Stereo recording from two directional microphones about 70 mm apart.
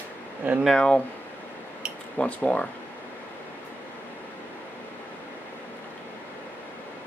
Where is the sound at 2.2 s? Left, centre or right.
Centre.